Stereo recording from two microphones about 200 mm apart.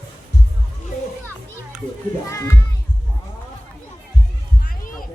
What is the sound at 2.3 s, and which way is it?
Music, 15° left (ahead or behind).